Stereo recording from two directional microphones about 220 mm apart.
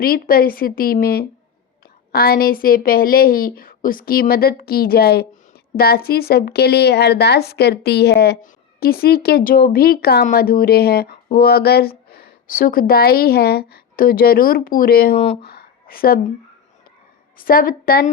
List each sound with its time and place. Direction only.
0.0 s speech: 40° left (ahead or behind)
15.2 s speech: 25° left (ahead or behind)
15.4 s a sound: 45° left (ahead or behind)
17.3 s a woman's voice: 40° left (ahead or behind)